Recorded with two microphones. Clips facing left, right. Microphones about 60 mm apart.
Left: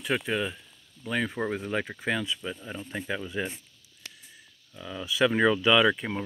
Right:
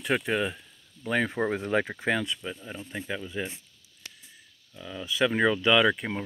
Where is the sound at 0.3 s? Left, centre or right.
Right.